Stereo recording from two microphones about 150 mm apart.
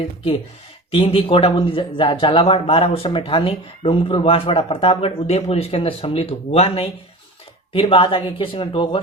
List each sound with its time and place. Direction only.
0.9 s speech: 40° left (ahead or behind)